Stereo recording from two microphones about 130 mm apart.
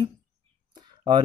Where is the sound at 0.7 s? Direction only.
35° right (ahead or behind).